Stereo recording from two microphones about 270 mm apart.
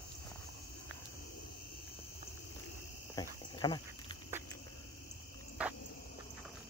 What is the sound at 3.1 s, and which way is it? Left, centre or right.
Cricket, centre.